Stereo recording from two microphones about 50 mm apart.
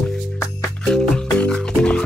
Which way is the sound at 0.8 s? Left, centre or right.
Centre.